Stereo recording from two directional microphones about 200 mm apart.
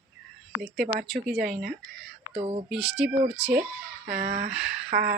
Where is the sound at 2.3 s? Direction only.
25° right (ahead or behind).